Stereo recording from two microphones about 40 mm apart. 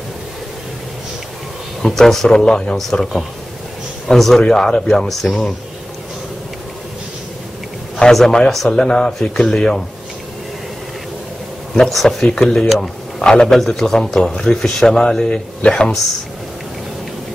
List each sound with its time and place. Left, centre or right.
1.8 s speech: centre
2.2 s speech: centre
4.4 s a man's voice: centre
4.9 s speech: centre
8.0 s a man's voice: left
11.9 s speech: centre
12.6 s speech: centre
13.2 s a man's voice: centre